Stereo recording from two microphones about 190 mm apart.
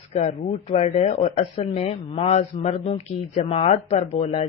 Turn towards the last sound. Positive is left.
turn(degrees=35)  # may be behind; listen again after turning